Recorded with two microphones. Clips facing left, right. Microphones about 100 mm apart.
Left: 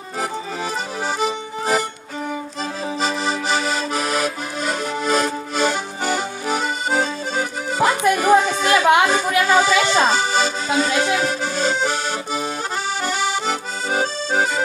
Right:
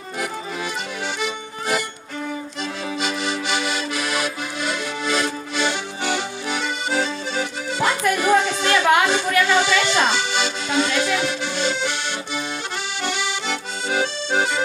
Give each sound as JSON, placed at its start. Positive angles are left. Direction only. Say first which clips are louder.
{"t": 1.2, "sound": "accordion", "louder": "left 5 dB", "side_deg": 40}
{"t": 3.0, "sound": "accordion", "louder": "left 3 dB", "side_deg": 35}
{"t": 8.2, "sound": "music", "louder": "left 2 dB", "side_deg": 40}
{"t": 9.0, "sound": "speech", "louder": "left 2 dB", "side_deg": 40}
{"t": 13.0, "sound": "accordion", "louder": "left 3 dB", "side_deg": 40}